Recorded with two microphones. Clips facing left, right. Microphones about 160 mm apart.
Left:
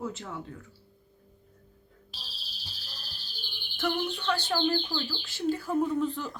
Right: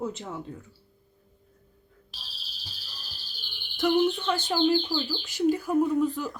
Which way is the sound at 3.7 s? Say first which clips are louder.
Right 8 dB; 20° right (ahead or behind).